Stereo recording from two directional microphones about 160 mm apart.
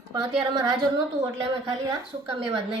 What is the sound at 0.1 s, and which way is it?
Speech, 30° right (ahead or behind).